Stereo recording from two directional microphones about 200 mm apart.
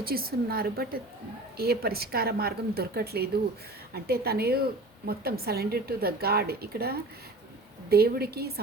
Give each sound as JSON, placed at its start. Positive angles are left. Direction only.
{"t": 0.0, "sound": "a woman's voice", "side_deg": -50}